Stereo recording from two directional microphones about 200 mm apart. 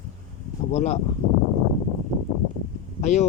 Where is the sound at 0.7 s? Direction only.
35° left (ahead or behind).